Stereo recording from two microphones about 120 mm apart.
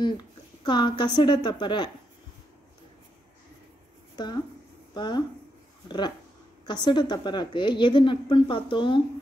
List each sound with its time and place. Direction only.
0.0 s a woman's voice: 40° left (ahead or behind)
4.9 s a woman's voice: 40° left (ahead or behind)